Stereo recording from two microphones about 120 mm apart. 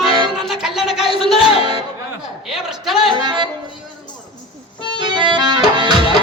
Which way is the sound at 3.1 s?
40° right (ahead or behind).